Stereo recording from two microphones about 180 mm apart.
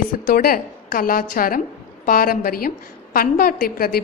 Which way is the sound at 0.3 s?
55° left (ahead or behind).